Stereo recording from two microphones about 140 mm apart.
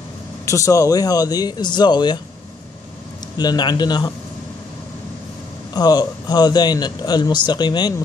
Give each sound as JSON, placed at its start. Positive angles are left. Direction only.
{"t": 0.5, "sound": "a man's voice", "side_deg": 20}
{"t": 3.3, "sound": "speech", "side_deg": 30}
{"t": 5.8, "sound": "a man's voice", "side_deg": 30}